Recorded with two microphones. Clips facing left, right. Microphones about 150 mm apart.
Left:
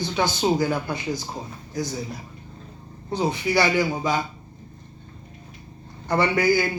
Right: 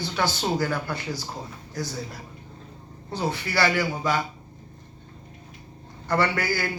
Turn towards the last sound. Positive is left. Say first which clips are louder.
# left 5 dB
turn(degrees=15)  # may be behind; listen again after turning